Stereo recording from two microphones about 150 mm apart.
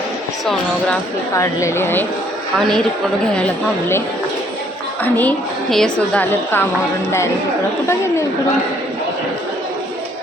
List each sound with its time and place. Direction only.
1.4 s a woman's voice: 15° left (ahead or behind)
2.6 s a woman's voice: centre (ahead or behind)
5.0 s a woman's voice: 10° left (ahead or behind)